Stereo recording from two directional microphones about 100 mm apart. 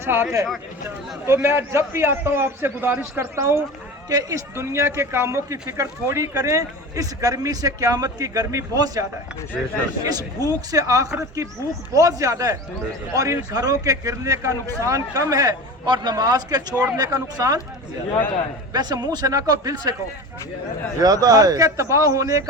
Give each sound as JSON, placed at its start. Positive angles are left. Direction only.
{"t": 0.0, "sound": "a man's voice", "side_deg": -20}
{"t": 4.5, "sound": "speech", "side_deg": -25}
{"t": 9.6, "sound": "speech", "side_deg": -15}
{"t": 10.0, "sound": "speech", "side_deg": -40}
{"t": 18.7, "sound": "speech", "side_deg": -45}
{"t": 21.0, "sound": "speech", "side_deg": -40}